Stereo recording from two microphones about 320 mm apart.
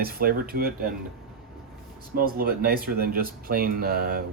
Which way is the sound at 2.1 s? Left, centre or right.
Right.